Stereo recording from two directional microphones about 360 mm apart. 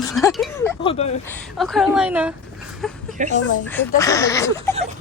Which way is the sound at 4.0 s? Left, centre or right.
Centre.